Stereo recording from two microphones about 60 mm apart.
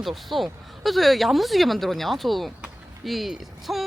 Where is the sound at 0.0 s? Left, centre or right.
Centre.